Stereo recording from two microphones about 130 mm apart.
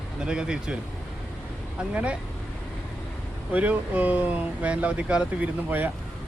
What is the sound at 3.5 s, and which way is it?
Speech, 10° right (ahead or behind).